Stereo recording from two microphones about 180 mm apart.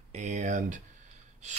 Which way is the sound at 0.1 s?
40° right (ahead or behind).